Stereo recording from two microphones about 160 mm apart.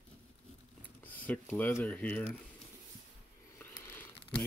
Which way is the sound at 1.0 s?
10° left (ahead or behind).